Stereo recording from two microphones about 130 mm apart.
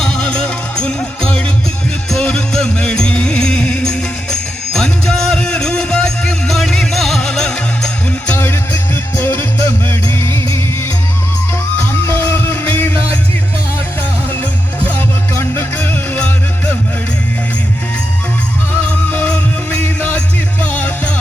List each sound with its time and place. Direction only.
0.0 s music: 5° left (ahead or behind)
11.8 s music: 15° left (ahead or behind)
14.8 s music: 15° left (ahead or behind)
18.9 s music: 10° left (ahead or behind)